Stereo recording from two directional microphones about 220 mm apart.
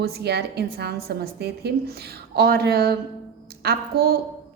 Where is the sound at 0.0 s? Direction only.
50° right (ahead or behind).